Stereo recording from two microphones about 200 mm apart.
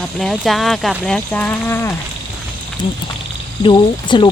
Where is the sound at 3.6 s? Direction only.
25° left (ahead or behind).